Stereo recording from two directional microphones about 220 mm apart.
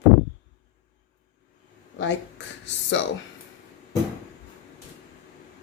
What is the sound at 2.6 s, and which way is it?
Speech, 55° left (ahead or behind).